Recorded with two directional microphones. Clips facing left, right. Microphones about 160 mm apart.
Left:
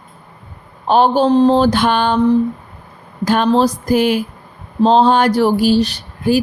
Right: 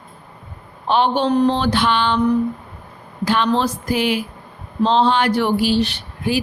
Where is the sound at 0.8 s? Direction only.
40° left (ahead or behind).